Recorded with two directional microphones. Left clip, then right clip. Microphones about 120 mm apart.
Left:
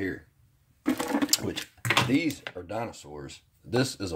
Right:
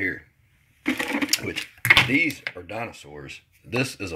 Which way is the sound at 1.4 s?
30° left (ahead or behind).